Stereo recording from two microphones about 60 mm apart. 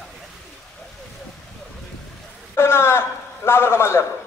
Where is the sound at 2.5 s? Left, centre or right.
Left.